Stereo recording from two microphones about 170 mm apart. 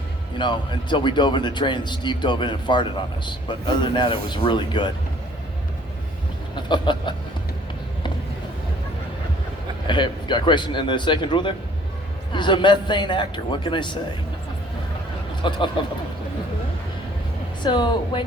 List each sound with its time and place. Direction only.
0.3 s a man's voice: 25° left (ahead or behind)
6.6 s chuckle: 25° left (ahead or behind)
9.8 s a man's voice: 30° left (ahead or behind)
15.4 s a man's voice: 30° left (ahead or behind)
17.6 s a man's voice: 25° left (ahead or behind)